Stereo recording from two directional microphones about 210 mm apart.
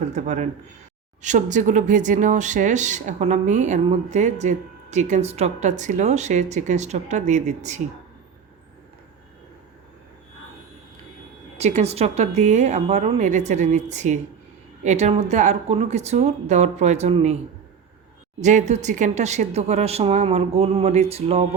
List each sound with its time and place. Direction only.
0.1 s speech: 35° right (ahead or behind)
11.5 s speech: 30° right (ahead or behind)
18.3 s speech: 35° right (ahead or behind)